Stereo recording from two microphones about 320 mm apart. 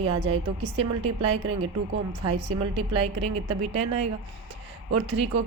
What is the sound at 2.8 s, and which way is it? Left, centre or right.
A woman's voice, centre.